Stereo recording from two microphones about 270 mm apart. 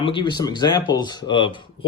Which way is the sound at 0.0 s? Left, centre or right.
Centre.